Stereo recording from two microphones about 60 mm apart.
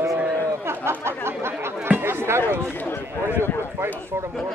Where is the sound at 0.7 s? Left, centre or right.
Right.